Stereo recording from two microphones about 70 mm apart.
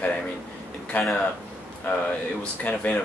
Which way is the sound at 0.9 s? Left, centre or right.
Centre.